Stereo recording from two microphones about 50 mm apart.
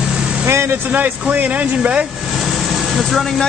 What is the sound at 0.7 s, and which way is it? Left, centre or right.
Speech, right.